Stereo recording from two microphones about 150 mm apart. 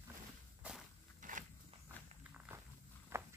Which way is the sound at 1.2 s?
60° right (ahead or behind).